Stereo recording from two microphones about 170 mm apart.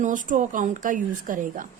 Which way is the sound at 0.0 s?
50° right (ahead or behind).